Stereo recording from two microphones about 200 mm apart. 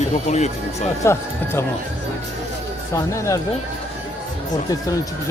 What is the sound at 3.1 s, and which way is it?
Speech, 15° left (ahead or behind).